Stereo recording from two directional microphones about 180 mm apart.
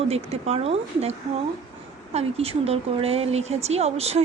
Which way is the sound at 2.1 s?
35° right (ahead or behind).